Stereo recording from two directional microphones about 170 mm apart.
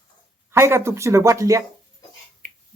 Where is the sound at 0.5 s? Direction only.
15° right (ahead or behind).